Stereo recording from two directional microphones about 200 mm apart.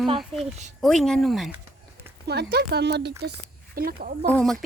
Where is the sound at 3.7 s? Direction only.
45° right (ahead or behind).